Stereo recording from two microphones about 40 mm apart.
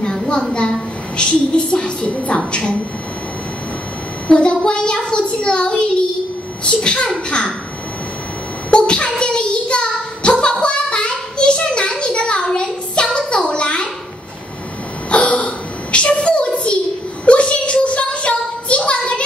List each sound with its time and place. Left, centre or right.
0.3 s child singing: left
1.1 s a woman's voice: left
4.3 s child singing: left
7.2 s a woman's voice: left
8.6 s child singing: left
13.1 s a sound: left
15.0 s a sound: left